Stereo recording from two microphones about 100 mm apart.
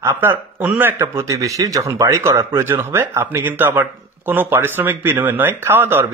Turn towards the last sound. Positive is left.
turn(degrees=-20)  # may be behind; listen again after turning